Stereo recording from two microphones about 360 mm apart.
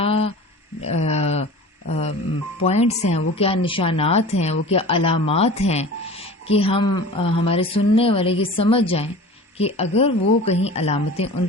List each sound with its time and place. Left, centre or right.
0.0 s a sound: centre
1.9 s telephone dialing: centre
2.6 s speech: centre